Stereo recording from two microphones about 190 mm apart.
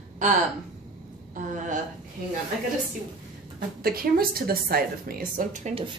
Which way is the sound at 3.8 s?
50° right (ahead or behind).